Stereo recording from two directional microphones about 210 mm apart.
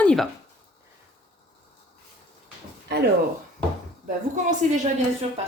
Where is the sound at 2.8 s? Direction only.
50° right (ahead or behind).